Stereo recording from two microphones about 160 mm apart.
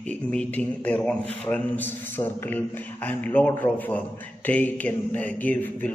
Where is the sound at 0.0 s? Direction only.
5° left (ahead or behind).